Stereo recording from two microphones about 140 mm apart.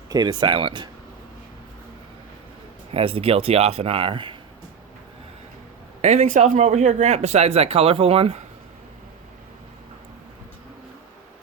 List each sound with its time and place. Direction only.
0.1 s speech: 30° right (ahead or behind)
2.9 s speech: 40° right (ahead or behind)
6.0 s speech: 55° right (ahead or behind)